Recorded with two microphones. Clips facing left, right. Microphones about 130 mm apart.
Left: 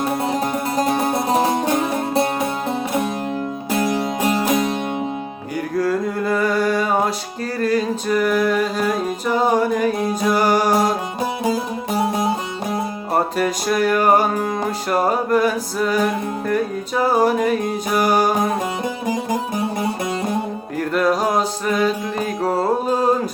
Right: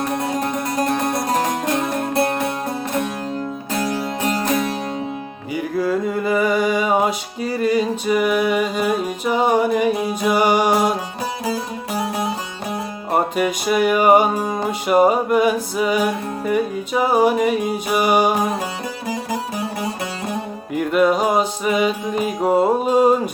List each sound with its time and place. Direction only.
0.1 s music: 10° left (ahead or behind)
2.6 s music: 10° left (ahead or behind)
5.5 s a sound: 5° right (ahead or behind)
7.6 s music: 10° right (ahead or behind)
11.9 s music: 25° left (ahead or behind)
13.1 s music: 5° right (ahead or behind)
19.0 s music: 20° left (ahead or behind)
20.7 s music: 10° right (ahead or behind)